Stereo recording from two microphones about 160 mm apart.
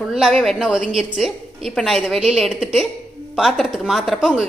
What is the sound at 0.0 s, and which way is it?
A woman's voice, 5° right (ahead or behind).